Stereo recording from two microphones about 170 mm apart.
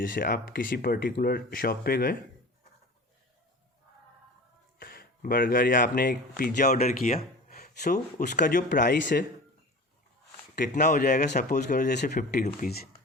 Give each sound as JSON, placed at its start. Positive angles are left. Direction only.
{"t": 0.0, "sound": "speech", "side_deg": 55}
{"t": 4.8, "sound": "speech", "side_deg": 60}
{"t": 7.4, "sound": "a sound", "side_deg": 55}
{"t": 8.4, "sound": "speech", "side_deg": 50}
{"t": 10.5, "sound": "speech", "side_deg": 50}
{"t": 12.5, "sound": "speech", "side_deg": 65}